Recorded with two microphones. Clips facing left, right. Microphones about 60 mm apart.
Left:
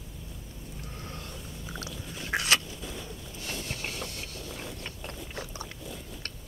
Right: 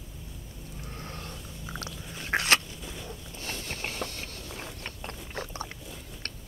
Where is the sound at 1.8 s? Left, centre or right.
Right.